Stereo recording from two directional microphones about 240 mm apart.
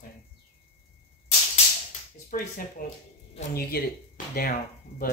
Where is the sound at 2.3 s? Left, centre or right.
Left.